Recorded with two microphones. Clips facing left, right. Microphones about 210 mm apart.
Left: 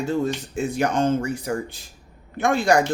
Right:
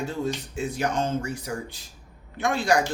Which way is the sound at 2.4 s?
45° left (ahead or behind).